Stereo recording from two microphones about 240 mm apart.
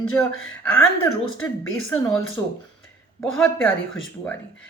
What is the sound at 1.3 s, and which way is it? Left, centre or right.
Speech, left.